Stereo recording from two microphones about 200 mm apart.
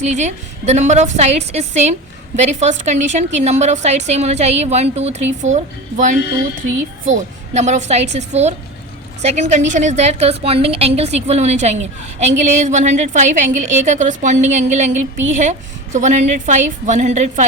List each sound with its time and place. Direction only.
0.0 s a woman's voice: 35° right (ahead or behind)